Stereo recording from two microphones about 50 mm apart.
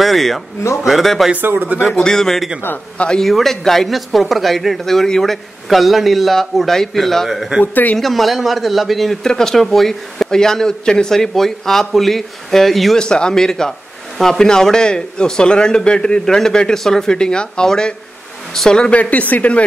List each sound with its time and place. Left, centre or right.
0.0 s a man's voice: centre
1.4 s speech: right
1.9 s a man's voice: centre
7.6 s speech: left
8.0 s a man's voice: centre
12.9 s speech: centre
18.9 s speech: left